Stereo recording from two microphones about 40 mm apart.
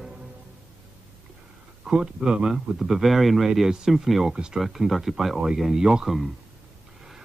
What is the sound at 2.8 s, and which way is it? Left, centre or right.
Speech, centre.